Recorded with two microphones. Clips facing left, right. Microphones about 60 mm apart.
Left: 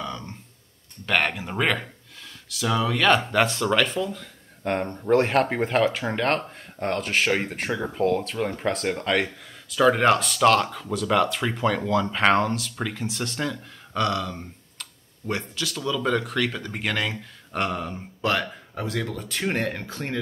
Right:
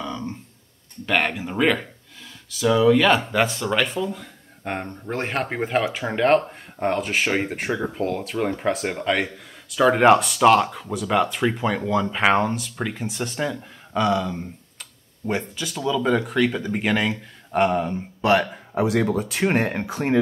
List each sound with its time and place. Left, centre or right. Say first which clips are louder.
0.0 s grunt: right 3 dB; centre
1.0 s speech: right 1 dB; centre